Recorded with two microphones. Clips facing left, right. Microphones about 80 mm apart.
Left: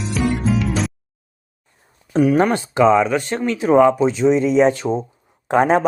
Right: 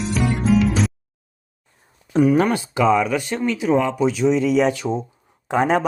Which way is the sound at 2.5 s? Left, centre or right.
Left.